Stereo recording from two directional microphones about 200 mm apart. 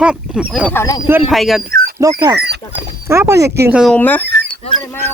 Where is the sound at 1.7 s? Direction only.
50° right (ahead or behind).